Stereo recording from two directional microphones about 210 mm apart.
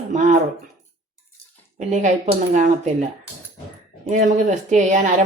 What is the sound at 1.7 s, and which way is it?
Speech, 35° right (ahead or behind).